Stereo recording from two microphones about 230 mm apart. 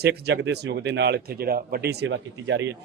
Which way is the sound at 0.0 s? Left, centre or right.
Right.